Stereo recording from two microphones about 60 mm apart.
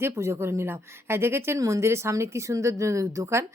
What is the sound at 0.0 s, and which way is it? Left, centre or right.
Speech, right.